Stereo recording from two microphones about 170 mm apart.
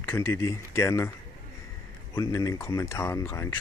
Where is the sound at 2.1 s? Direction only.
20° left (ahead or behind).